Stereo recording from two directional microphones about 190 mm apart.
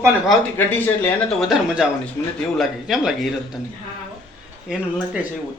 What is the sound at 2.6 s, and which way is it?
Speech, centre (ahead or behind).